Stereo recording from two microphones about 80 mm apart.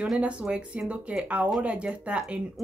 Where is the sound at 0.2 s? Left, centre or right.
Centre.